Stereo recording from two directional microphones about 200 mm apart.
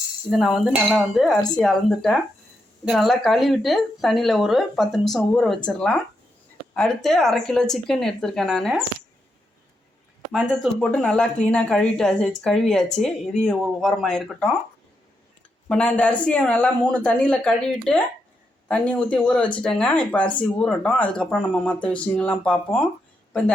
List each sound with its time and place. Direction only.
0.3 s speech: centre (ahead or behind)
10.3 s speech: 5° right (ahead or behind)
10.8 s speech: 5° left (ahead or behind)
15.7 s speech: 5° left (ahead or behind)